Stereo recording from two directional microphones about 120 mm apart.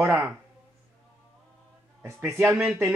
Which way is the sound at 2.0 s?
20° right (ahead or behind).